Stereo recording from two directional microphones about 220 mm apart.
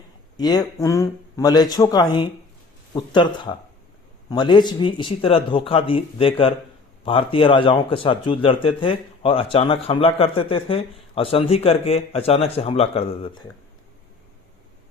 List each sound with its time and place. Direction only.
0.3 s speech: 20° left (ahead or behind)